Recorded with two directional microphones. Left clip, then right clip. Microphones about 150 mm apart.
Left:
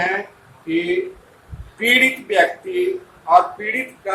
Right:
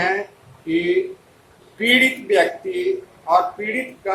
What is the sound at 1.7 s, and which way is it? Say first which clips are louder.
Speech: left 1 dB; 20° right (ahead or behind).